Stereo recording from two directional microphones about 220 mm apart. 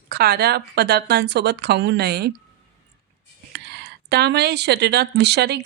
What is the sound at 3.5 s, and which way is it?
Speech, 50° right (ahead or behind).